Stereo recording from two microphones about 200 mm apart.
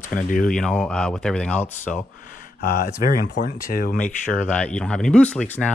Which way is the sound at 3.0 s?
45° left (ahead or behind).